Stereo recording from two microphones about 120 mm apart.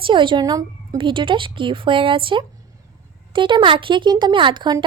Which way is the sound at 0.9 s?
45° right (ahead or behind).